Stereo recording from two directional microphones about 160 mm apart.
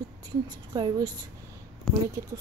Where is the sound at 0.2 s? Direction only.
25° right (ahead or behind).